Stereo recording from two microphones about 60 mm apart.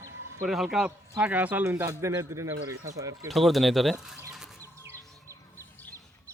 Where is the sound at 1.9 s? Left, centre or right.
Right.